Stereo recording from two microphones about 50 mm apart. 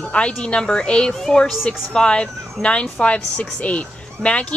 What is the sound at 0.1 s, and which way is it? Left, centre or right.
A woman's voice, left.